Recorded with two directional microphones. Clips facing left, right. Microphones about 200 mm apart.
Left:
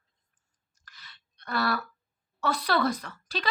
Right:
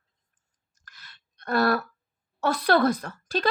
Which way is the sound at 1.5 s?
50° right (ahead or behind).